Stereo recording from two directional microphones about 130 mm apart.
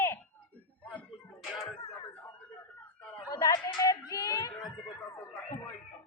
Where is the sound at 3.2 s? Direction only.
30° left (ahead or behind).